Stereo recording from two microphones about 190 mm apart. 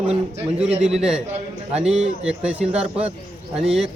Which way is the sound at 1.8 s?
35° right (ahead or behind).